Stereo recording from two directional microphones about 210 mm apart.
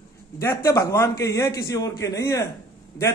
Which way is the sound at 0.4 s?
15° left (ahead or behind).